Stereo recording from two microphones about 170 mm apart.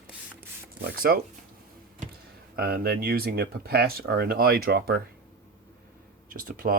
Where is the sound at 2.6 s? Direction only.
70° right (ahead or behind).